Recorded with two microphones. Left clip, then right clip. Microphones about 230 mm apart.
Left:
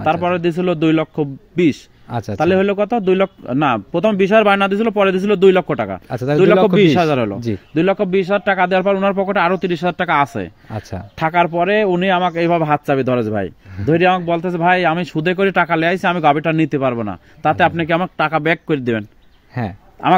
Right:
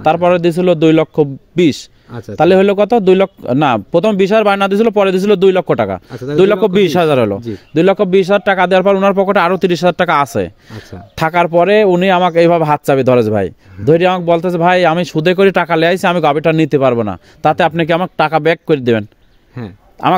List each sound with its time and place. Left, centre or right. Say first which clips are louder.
0.0 s a man's voice: right 6 dB; right
2.0 s speech: left 8 dB; left
2.3 s a man's voice: right 6 dB; right
6.0 s speech: left 3 dB; left
6.4 s a man's voice: right 1 dB; right
19.6 s speech: left 5 dB; left